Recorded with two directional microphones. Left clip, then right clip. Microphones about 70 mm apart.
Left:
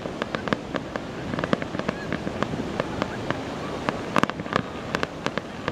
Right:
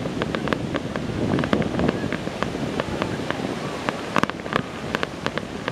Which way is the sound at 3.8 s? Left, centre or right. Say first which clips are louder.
Right 1 dB; centre.